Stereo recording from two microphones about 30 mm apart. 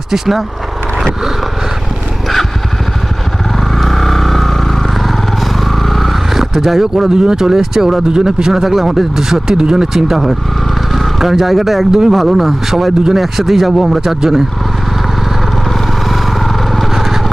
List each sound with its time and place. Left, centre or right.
0.1 s speech: centre
3.8 s vehicle: centre
5.5 s a sound: centre
6.7 s speech: centre
7.1 s speech: right
8.1 s speech: right
8.6 s speech: centre
11.9 s speech: right
12.3 s speech: centre